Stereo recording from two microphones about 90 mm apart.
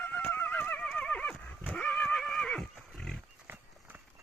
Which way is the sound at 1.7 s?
15° left (ahead or behind).